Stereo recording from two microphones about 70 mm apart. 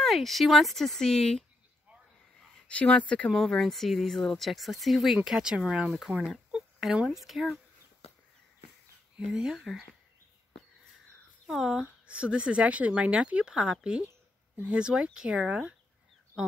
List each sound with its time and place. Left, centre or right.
0.0 s speech: centre
2.7 s speech: centre
6.5 s a sound: centre
7.1 s speech: centre
9.2 s speech: centre
11.4 s speech: centre
16.4 s a sound: centre